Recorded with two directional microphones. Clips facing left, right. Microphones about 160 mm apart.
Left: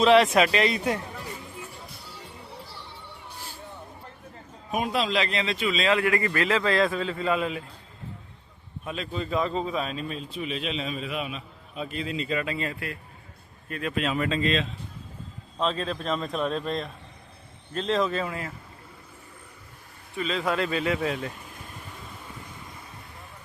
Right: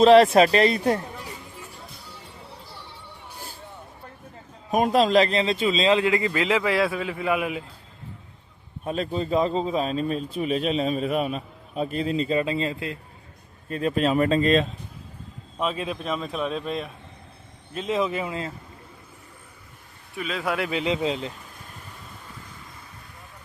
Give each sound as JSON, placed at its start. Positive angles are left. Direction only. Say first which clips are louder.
{"t": 0.0, "sound": "a man's voice", "louder": "right 5 dB", "side_deg": -35}
{"t": 4.7, "sound": "a man's voice", "louder": "right 7 dB", "side_deg": -40}
{"t": 8.8, "sound": "a man's voice", "louder": "right 6 dB", "side_deg": -40}
{"t": 13.7, "sound": "a man's voice", "louder": "right 6 dB", "side_deg": -35}
{"t": 15.5, "sound": "speech", "louder": "even", "side_deg": -10}
{"t": 20.1, "sound": "speech", "louder": "left 1 dB", "side_deg": -5}
{"t": 20.7, "sound": "a man's voice", "louder": "right 2 dB", "side_deg": -15}